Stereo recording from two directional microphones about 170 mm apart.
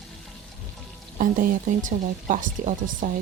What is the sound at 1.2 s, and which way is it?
Speech, 50° right (ahead or behind).